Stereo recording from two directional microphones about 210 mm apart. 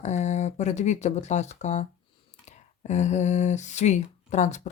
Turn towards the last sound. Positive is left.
turn(degrees=35)  # may be behind; listen again after turning